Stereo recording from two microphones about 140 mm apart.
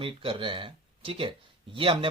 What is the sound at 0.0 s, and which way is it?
A man's voice, 40° right (ahead or behind).